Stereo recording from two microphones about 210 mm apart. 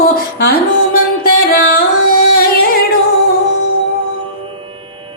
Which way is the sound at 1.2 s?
45° left (ahead or behind).